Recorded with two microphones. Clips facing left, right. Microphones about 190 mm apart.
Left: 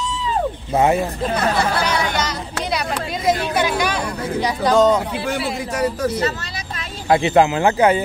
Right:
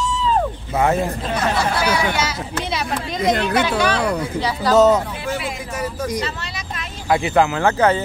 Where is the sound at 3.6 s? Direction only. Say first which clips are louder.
Right 2 dB; 15° left (ahead or behind).